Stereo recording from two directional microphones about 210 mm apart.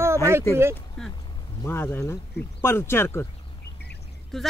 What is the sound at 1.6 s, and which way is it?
Speech, 10° left (ahead or behind).